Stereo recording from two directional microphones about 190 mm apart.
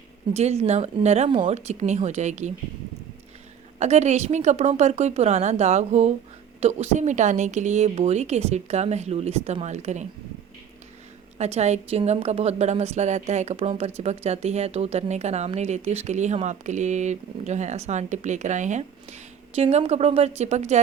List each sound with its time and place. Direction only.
0.3 s a woman's voice: 35° right (ahead or behind)
3.8 s a woman's voice: 35° right (ahead or behind)
11.3 s a woman's voice: 35° right (ahead or behind)